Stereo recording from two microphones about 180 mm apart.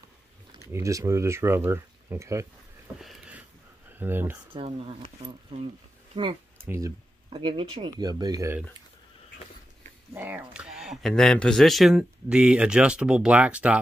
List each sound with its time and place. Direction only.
0.7 s speech: 15° right (ahead or behind)
3.0 s a sound: 5° right (ahead or behind)
3.9 s speech: 10° right (ahead or behind)
4.5 s speech: 30° right (ahead or behind)
7.2 s speech: 30° right (ahead or behind)
10.1 s speech: 10° right (ahead or behind)